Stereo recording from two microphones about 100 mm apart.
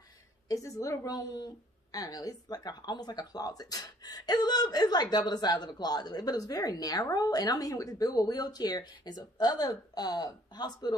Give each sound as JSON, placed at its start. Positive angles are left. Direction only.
{"t": 0.5, "sound": "a woman's voice", "side_deg": 35}